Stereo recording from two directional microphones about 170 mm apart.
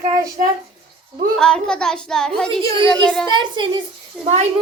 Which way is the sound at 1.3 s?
5° left (ahead or behind).